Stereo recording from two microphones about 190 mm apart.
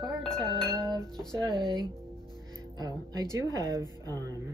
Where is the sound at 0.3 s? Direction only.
5° left (ahead or behind).